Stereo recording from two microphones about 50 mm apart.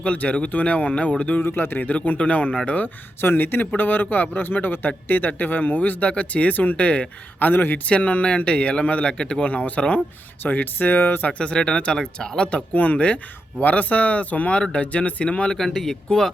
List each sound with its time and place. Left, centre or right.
0.0 s speech: left
1.4 s speech: left
1.8 s speech: left
3.2 s speech: left
7.3 s speech: left
7.9 s speech: left
11.3 s speech: left
12.5 s speech: left
15.5 s speech: centre